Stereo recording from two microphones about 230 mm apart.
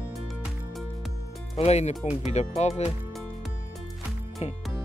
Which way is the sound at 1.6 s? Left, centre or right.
Left.